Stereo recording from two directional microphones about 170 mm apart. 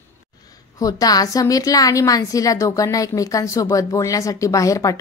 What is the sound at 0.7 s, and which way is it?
A woman's voice, 20° left (ahead or behind).